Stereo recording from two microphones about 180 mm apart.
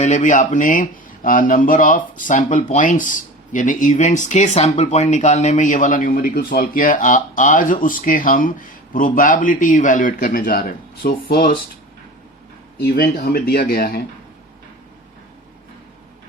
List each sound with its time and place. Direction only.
0.0 s speech: 45° left (ahead or behind)
12.8 s speech: 60° left (ahead or behind)